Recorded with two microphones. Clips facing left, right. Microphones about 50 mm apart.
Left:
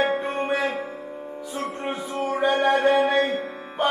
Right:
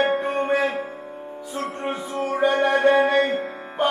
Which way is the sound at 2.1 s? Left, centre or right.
Left.